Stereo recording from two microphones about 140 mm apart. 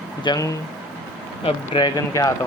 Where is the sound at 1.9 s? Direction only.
25° left (ahead or behind).